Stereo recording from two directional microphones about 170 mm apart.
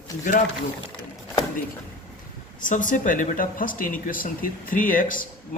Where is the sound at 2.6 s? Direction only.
50° left (ahead or behind).